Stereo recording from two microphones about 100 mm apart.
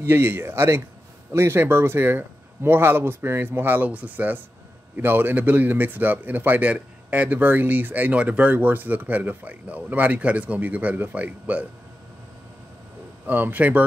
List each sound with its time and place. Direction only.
0.0 s a man's voice: 20° right (ahead or behind)
13.3 s a man's voice: 15° right (ahead or behind)